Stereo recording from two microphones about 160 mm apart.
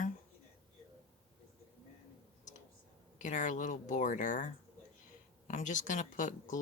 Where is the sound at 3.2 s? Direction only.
50° left (ahead or behind).